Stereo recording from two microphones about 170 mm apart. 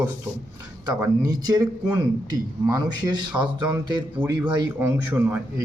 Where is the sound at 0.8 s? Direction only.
20° right (ahead or behind).